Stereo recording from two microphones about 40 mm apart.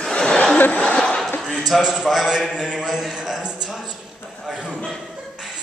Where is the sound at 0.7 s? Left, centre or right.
Left.